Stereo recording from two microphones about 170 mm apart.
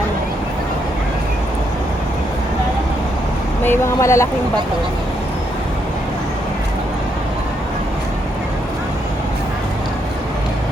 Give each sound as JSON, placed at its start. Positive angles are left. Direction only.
{"t": 3.6, "sound": "speech", "side_deg": 15}